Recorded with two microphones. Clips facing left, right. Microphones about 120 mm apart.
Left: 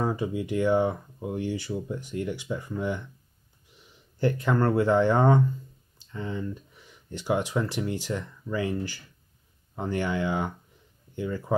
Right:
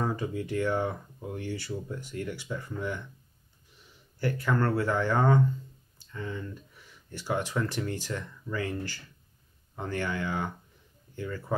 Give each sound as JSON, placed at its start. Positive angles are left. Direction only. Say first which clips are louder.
{"t": 0.0, "sound": "speech", "louder": "left 3 dB", "side_deg": 15}
{"t": 4.2, "sound": "speech", "louder": "left 4 dB", "side_deg": 20}